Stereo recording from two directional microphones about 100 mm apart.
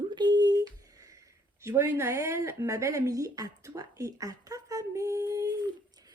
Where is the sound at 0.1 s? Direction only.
45° right (ahead or behind).